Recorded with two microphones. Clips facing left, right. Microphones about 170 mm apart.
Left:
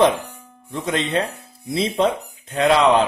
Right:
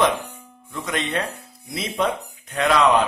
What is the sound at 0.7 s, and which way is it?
Music, 30° left (ahead or behind).